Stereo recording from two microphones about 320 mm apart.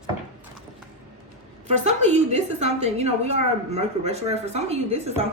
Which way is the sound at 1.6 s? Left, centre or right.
Right.